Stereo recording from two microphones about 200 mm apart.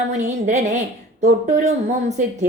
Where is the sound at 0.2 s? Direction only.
35° right (ahead or behind).